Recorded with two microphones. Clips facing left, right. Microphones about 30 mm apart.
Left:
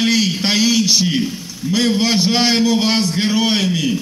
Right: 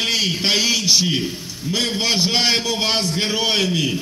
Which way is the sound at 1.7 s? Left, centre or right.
Centre.